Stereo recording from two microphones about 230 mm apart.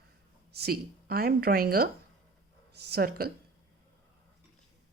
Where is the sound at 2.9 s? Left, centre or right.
Right.